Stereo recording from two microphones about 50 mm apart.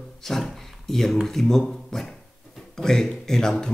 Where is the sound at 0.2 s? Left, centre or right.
Centre.